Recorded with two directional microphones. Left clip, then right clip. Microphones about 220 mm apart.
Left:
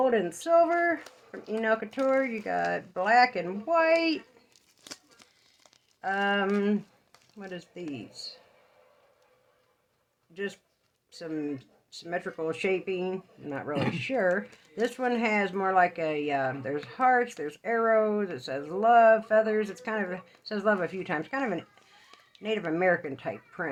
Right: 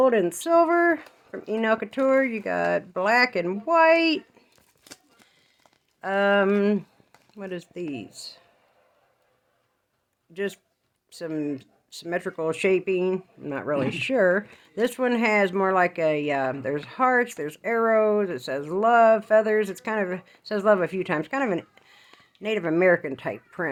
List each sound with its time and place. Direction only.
0.0 s speech: 45° right (ahead or behind)
4.8 s tearing: 5° right (ahead or behind)
6.0 s speech: 45° right (ahead or behind)
10.3 s speech: 45° right (ahead or behind)